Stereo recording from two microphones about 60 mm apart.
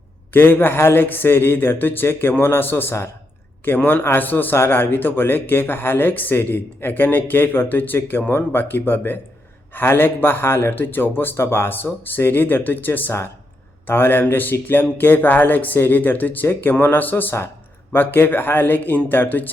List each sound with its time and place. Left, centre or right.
0.3 s a man's voice: left